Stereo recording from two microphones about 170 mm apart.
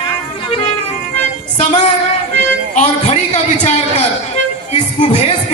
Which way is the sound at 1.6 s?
45° left (ahead or behind).